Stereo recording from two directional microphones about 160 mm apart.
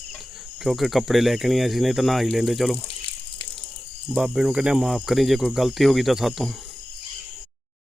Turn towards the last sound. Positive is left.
turn(degrees=0)  # may be behind; listen again after turning